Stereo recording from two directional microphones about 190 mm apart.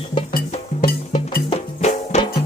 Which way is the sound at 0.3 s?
45° left (ahead or behind).